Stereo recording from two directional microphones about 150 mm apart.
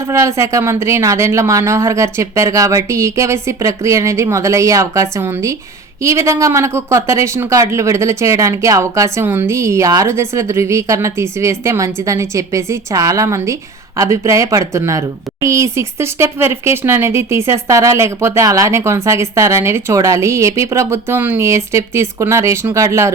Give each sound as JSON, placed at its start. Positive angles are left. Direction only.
{"t": 0.1, "sound": "speech", "side_deg": -20}